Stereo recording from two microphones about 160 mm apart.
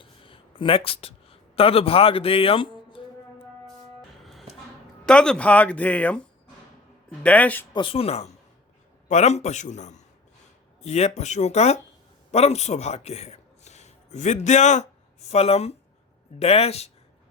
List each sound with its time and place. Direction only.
0.0 s a sound: 35° left (ahead or behind)
5.0 s speech: 5° left (ahead or behind)
7.7 s a man's voice: 30° left (ahead or behind)